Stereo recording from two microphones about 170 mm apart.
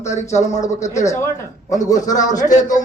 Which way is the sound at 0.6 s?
20° left (ahead or behind).